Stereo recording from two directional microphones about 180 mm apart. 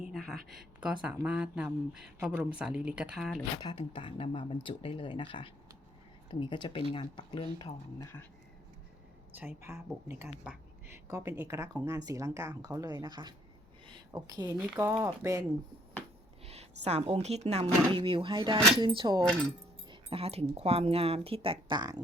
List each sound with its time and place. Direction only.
0.0 s a sound: centre (ahead or behind)
0.5 s speech: 5° right (ahead or behind)
3.6 s speech: 25° left (ahead or behind)
9.3 s speech: 10° right (ahead or behind)
14.5 s speech: 10° right (ahead or behind)
16.5 s speech: 35° right (ahead or behind)